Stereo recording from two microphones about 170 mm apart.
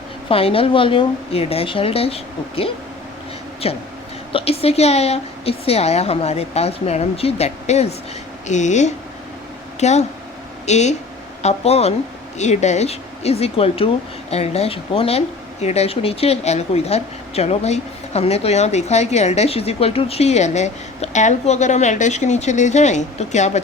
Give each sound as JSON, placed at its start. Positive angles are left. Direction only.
{"t": 0.3, "sound": "a woman's voice", "side_deg": 35}